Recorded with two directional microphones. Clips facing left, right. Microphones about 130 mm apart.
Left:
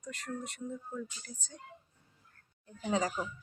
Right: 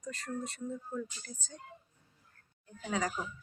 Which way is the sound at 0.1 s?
15° left (ahead or behind).